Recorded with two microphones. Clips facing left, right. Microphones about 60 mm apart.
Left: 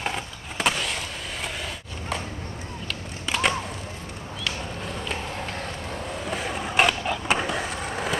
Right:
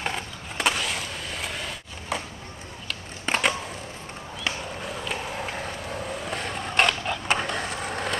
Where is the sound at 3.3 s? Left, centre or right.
Right.